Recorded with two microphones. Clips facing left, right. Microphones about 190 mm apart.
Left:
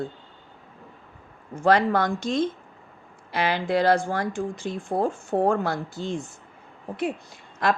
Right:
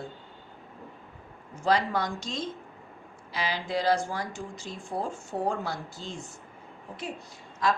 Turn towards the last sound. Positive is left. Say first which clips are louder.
# left 3 dB
turn(degrees=60)  # may be behind; listen again after turning